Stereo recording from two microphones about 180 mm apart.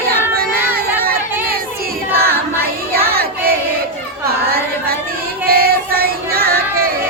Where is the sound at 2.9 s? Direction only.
55° right (ahead or behind).